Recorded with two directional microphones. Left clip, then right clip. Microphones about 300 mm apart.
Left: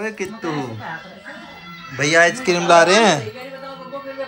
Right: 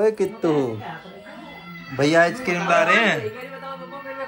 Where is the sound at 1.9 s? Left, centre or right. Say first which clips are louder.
Left 3 dB; centre.